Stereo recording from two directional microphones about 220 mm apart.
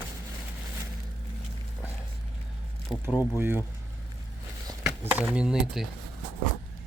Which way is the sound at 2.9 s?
20° left (ahead or behind).